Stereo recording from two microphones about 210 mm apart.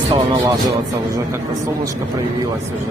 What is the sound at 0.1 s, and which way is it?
Speech, 20° right (ahead or behind).